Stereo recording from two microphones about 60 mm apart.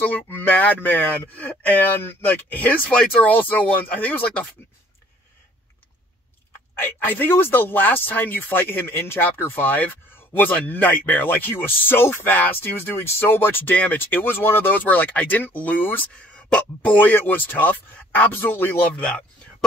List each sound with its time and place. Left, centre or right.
0.0 s speech: left
7.1 s speech: left
16.3 s speech: centre
18.9 s speech: centre